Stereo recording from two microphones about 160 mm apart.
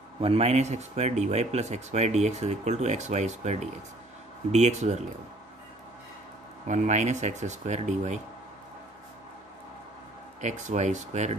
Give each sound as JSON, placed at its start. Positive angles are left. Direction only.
{"t": 0.2, "sound": "speech", "side_deg": -40}
{"t": 6.7, "sound": "speech", "side_deg": -50}
{"t": 10.4, "sound": "speech", "side_deg": -45}